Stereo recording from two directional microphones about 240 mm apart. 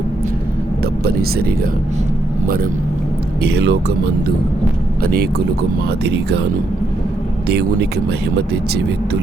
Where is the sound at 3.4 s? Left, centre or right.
Right.